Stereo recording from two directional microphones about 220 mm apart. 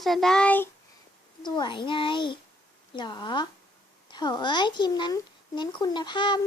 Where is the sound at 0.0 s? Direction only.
Centre (ahead or behind).